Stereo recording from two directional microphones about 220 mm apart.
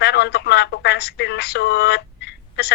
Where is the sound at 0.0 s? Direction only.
50° left (ahead or behind).